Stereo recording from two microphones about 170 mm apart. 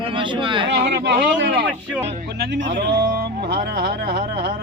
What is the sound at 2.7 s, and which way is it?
Speech, 70° right (ahead or behind).